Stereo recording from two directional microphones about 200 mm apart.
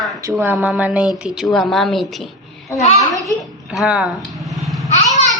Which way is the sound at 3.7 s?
5° right (ahead or behind).